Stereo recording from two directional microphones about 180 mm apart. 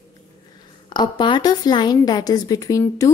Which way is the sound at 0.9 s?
25° left (ahead or behind).